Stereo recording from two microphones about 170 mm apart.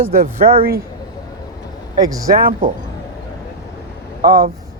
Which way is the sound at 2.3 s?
55° right (ahead or behind).